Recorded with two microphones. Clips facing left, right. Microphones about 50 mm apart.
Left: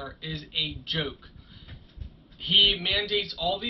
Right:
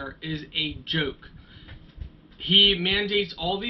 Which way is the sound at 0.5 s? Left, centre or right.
Right.